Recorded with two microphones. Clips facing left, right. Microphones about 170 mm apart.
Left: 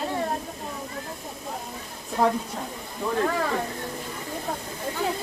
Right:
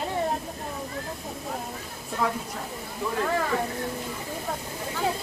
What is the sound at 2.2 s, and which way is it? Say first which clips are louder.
Speech: left 5 dB; 40° left (ahead or behind).